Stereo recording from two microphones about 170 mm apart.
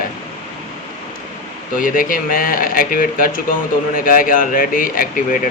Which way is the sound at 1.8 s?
50° left (ahead or behind).